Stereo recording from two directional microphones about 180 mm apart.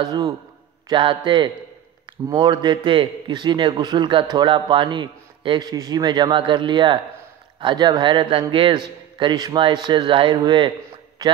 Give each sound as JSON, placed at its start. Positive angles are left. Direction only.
{"t": 0.0, "sound": "a man's voice", "side_deg": -25}